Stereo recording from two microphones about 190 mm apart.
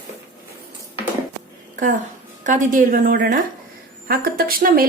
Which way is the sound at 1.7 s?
45° right (ahead or behind).